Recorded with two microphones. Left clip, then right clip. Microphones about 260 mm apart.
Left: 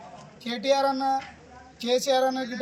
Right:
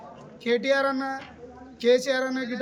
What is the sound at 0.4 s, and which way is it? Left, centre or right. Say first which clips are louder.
Speech: right 7 dB; right.